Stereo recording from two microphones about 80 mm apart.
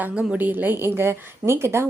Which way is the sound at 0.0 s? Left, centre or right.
Centre.